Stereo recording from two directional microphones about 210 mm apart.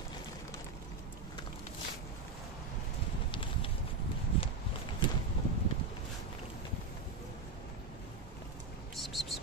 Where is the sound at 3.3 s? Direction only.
25° left (ahead or behind).